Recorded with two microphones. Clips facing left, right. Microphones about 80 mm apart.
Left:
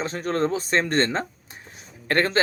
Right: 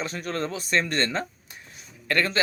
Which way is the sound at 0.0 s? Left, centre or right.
Left.